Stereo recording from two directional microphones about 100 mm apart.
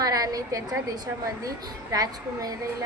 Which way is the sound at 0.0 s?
40° right (ahead or behind).